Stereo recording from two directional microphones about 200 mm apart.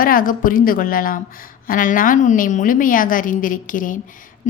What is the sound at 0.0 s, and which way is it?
A woman's voice, 45° left (ahead or behind).